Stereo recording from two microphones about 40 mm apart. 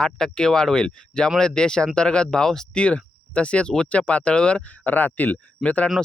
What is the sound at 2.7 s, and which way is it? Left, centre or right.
Speech, left.